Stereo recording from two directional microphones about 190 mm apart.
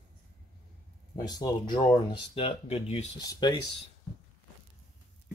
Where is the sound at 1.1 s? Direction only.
20° left (ahead or behind).